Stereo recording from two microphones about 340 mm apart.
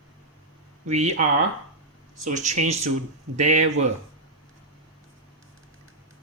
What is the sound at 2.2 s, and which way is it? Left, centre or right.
Speech, right.